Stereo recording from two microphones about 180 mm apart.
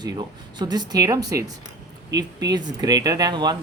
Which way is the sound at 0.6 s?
20° right (ahead or behind).